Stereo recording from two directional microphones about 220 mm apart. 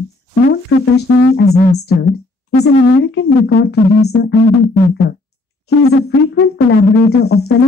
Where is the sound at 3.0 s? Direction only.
50° left (ahead or behind).